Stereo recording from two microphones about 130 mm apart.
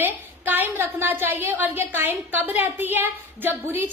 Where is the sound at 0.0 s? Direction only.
15° right (ahead or behind).